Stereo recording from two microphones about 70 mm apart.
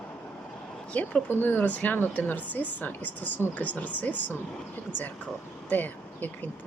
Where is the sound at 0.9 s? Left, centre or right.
Left.